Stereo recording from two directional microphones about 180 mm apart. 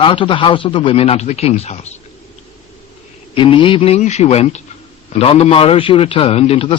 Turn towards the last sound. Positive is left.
turn(degrees=35)  # may be behind; listen again after turning